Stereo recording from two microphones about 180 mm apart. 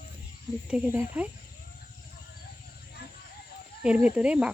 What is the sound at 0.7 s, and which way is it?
Speech, 10° right (ahead or behind).